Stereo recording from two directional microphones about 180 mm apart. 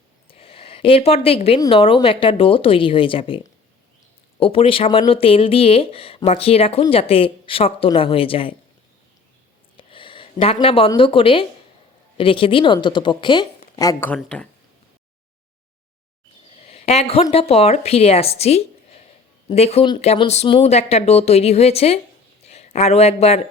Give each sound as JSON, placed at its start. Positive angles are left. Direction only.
{"t": 0.3, "sound": "a sound", "side_deg": 30}
{"t": 1.6, "sound": "speech", "side_deg": 30}
{"t": 9.7, "sound": "speech", "side_deg": 30}
{"t": 14.2, "sound": "speech", "side_deg": 5}
{"t": 16.6, "sound": "a sound", "side_deg": 35}
{"t": 17.3, "sound": "speech", "side_deg": 35}